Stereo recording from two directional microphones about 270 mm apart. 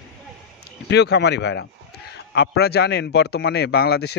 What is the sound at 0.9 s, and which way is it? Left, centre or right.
Speech, left.